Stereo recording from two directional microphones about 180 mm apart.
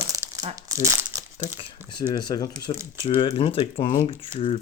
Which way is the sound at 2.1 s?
20° left (ahead or behind).